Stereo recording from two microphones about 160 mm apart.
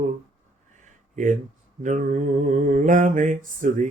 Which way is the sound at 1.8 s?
55° right (ahead or behind).